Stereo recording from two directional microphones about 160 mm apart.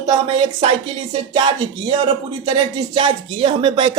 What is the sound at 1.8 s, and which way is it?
Speech, 30° right (ahead or behind).